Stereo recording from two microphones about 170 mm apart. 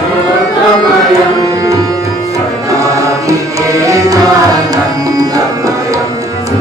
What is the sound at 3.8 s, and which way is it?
Tabla, 20° right (ahead or behind).